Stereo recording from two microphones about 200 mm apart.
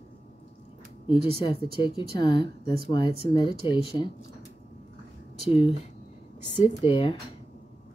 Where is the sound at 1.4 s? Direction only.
25° left (ahead or behind).